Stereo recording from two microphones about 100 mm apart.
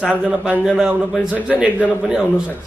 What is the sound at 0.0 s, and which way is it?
A man's voice, 10° right (ahead or behind).